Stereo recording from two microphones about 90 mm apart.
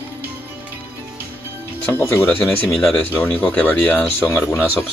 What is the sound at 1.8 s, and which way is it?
Speech, 25° left (ahead or behind).